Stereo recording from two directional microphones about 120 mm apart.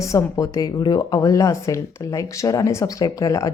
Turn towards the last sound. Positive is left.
turn(degrees=25)  # may be behind; listen again after turning